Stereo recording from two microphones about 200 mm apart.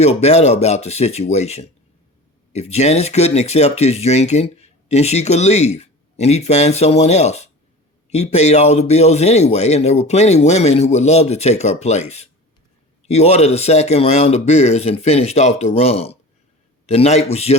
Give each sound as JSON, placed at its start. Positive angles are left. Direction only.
{"t": 0.0, "sound": "speech", "side_deg": 35}